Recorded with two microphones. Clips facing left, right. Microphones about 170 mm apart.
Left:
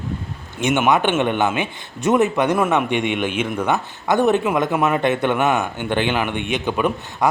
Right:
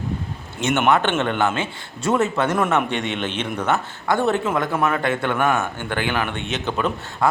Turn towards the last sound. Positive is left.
turn(degrees=15)  # may be behind; listen again after turning